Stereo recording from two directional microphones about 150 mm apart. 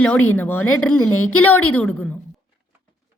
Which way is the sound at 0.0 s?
10° left (ahead or behind).